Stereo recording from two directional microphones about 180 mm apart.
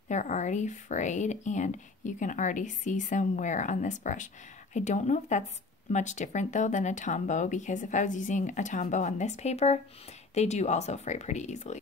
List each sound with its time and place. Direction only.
0.1 s speech: 40° left (ahead or behind)